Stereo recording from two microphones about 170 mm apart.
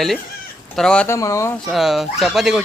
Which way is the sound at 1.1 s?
20° left (ahead or behind).